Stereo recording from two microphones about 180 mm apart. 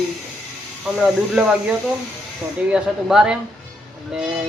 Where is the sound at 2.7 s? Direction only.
5° right (ahead or behind).